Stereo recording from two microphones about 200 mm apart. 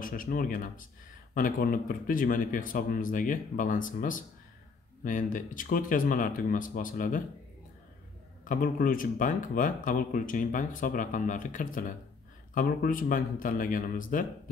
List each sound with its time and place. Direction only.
0.0 s a man's voice: 45° left (ahead or behind)
8.5 s a man's voice: 45° left (ahead or behind)